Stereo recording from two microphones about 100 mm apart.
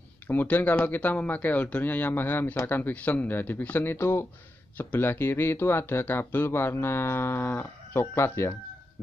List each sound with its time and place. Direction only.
0.3 s speech: 20° left (ahead or behind)